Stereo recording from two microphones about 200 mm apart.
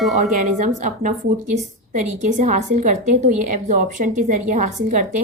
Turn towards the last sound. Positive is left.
turn(degrees=-40)  # may be behind; listen again after turning